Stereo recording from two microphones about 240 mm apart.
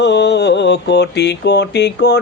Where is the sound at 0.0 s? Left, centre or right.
Left.